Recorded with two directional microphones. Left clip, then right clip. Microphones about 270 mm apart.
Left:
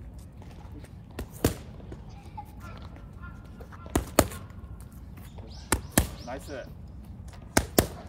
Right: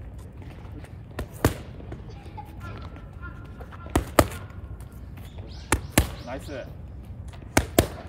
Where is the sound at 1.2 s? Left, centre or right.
Centre.